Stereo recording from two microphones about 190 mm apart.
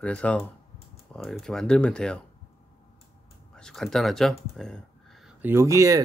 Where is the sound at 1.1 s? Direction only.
Centre (ahead or behind).